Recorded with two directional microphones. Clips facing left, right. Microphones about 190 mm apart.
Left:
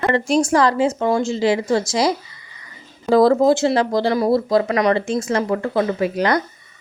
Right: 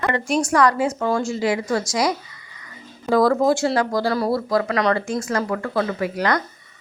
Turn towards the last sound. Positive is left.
turn(degrees=25)  # may be behind; listen again after turning